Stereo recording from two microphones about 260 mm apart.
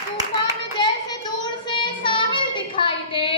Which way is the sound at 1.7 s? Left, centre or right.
Centre.